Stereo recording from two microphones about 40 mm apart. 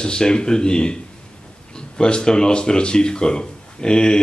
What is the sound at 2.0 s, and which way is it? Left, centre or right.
Speech, left.